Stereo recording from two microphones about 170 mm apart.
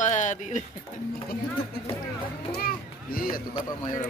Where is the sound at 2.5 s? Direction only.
60° left (ahead or behind).